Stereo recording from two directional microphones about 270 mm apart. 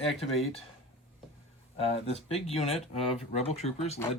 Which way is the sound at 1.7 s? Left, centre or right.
Left.